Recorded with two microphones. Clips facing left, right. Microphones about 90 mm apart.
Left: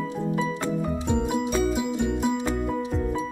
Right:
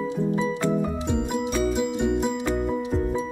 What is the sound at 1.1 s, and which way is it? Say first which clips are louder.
Music: left 3 dB; 5° left (ahead or behind).